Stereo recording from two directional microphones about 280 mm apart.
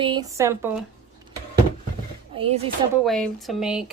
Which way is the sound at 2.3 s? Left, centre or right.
Right.